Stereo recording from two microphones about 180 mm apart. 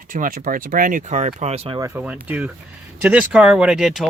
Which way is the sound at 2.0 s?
5° right (ahead or behind).